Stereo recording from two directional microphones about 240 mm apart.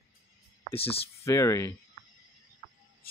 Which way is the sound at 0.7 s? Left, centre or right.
Left.